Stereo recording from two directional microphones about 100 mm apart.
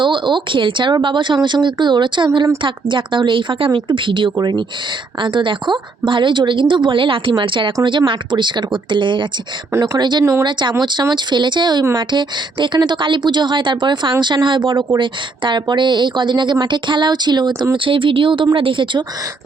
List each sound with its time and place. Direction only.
0.0 s a woman's voice: 50° right (ahead or behind)
9.7 s speech: 30° right (ahead or behind)
10.0 s a woman's voice: 45° right (ahead or behind)
17.8 s speech: 60° right (ahead or behind)